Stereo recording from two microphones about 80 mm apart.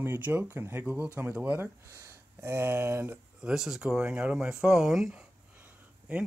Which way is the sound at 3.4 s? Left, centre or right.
Centre.